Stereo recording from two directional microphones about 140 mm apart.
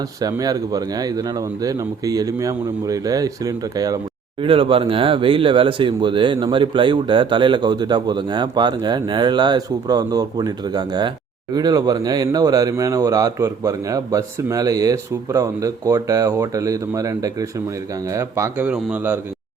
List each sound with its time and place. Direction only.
0.2 s speech: 25° right (ahead or behind)
4.4 s speech: 40° right (ahead or behind); by 19.2 s 10° right (ahead or behind)